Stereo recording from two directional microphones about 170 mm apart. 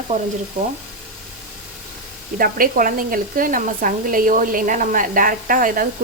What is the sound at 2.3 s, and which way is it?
Speech, 55° right (ahead or behind).